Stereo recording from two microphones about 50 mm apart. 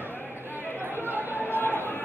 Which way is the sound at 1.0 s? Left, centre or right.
Right.